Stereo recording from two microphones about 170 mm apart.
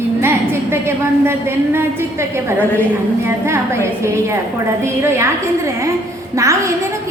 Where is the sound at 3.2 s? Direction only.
15° right (ahead or behind).